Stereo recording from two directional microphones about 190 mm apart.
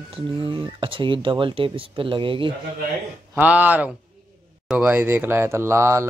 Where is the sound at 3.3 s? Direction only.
10° right (ahead or behind).